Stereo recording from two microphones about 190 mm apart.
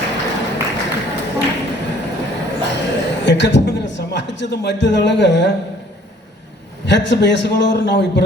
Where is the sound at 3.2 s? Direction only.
70° left (ahead or behind).